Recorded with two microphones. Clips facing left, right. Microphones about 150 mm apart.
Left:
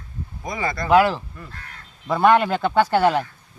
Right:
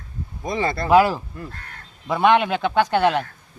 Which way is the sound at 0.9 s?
10° right (ahead or behind).